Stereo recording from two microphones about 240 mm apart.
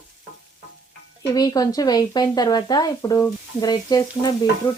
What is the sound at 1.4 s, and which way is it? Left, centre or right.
Speech, centre.